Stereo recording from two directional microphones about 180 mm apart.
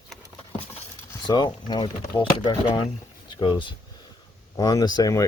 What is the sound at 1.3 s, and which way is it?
Speech, 25° left (ahead or behind).